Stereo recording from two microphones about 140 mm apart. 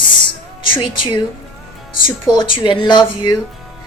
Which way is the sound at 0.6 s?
35° left (ahead or behind).